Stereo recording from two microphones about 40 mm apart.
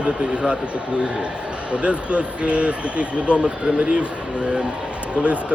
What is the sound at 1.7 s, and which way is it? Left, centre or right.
A man's voice, right.